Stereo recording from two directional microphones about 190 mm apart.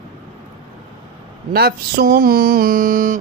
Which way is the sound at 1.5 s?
55° right (ahead or behind).